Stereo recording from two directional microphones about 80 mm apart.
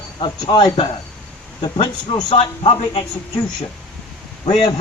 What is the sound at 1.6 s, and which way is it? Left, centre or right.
A man's voice, left.